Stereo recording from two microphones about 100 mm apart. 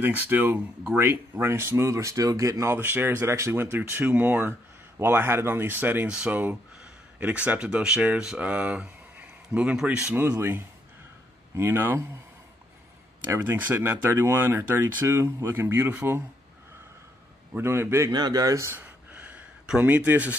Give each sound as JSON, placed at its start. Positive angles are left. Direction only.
{"t": 0.0, "sound": "speech", "side_deg": -20}
{"t": 11.5, "sound": "speech", "side_deg": -20}
{"t": 13.3, "sound": "speech", "side_deg": -20}
{"t": 17.6, "sound": "speech", "side_deg": -25}
{"t": 18.1, "sound": "speech", "side_deg": -40}
{"t": 18.8, "sound": "a sound", "side_deg": -15}